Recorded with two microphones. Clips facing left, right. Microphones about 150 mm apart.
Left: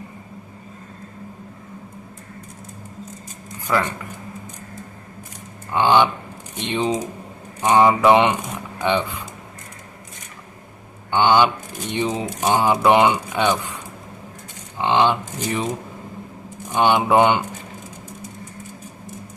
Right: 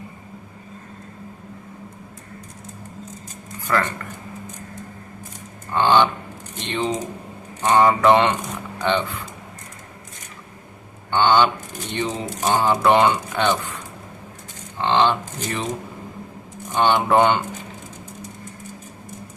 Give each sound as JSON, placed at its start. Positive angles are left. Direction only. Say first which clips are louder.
{"t": 3.7, "sound": "speech", "louder": "left 1 dB", "side_deg": 10}
{"t": 5.7, "sound": "speech", "louder": "left 1 dB", "side_deg": 15}
{"t": 11.1, "sound": "speech", "louder": "left 1 dB", "side_deg": 15}
{"t": 14.8, "sound": "speech", "louder": "left 1 dB", "side_deg": 15}
{"t": 16.7, "sound": "speech", "louder": "left 1 dB", "side_deg": 10}